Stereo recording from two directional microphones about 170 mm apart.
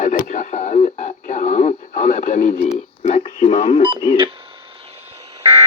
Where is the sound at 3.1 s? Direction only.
35° left (ahead or behind).